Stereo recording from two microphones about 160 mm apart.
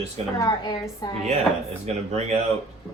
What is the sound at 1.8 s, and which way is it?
Speech, 45° right (ahead or behind).